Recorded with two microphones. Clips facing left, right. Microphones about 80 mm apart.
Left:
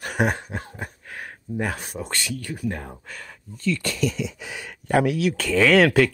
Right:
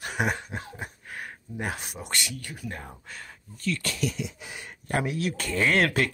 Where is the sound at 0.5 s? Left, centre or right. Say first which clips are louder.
Left 3 dB; left.